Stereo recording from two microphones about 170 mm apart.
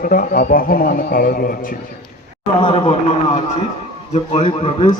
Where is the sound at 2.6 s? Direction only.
30° left (ahead or behind).